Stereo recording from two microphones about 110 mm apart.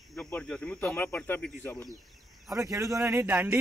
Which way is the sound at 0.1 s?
10° left (ahead or behind).